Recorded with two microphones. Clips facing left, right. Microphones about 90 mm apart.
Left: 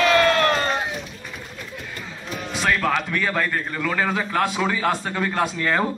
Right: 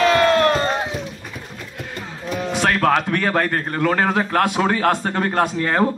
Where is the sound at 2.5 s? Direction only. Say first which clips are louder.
Right 4 dB; 60° right (ahead or behind).